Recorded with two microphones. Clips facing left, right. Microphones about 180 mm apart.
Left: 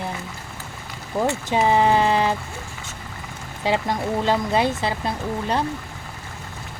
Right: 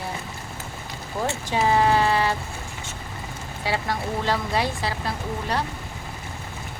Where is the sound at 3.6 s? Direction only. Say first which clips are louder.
Left 4 dB; 20° left (ahead or behind).